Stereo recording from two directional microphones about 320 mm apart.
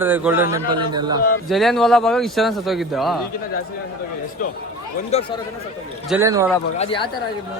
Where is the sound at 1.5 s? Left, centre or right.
Centre.